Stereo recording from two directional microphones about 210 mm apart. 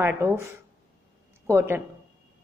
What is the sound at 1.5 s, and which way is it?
Speech, 10° right (ahead or behind).